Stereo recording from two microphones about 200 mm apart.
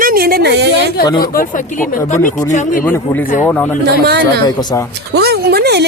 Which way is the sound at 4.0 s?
55° right (ahead or behind).